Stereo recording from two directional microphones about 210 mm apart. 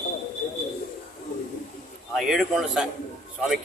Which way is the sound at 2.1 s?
Centre (ahead or behind).